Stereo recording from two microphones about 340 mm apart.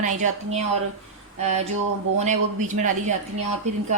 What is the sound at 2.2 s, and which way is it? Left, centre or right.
Speech, right.